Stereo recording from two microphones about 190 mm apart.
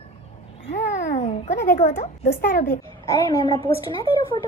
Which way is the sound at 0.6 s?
40° left (ahead or behind).